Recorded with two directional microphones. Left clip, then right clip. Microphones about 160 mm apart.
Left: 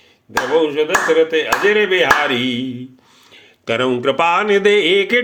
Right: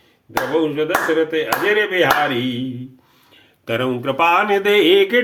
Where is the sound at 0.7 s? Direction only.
35° left (ahead or behind).